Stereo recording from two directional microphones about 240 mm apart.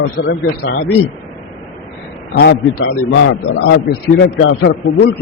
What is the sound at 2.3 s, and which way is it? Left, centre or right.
A man's voice, left.